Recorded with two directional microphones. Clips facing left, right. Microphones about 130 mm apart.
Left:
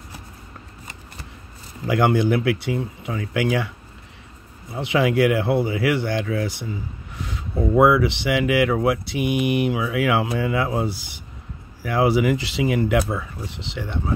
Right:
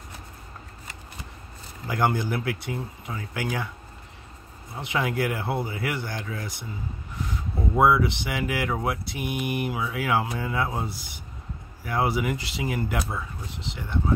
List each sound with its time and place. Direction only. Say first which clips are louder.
1.9 s speech: left 7 dB; 80° left
4.8 s speech: left 8 dB; 90° left